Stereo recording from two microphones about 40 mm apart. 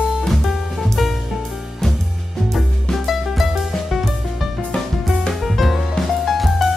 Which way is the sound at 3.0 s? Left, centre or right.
Centre.